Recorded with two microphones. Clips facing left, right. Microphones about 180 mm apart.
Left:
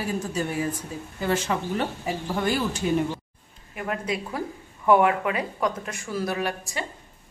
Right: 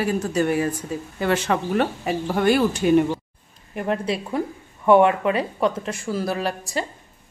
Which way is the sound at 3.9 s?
30° right (ahead or behind).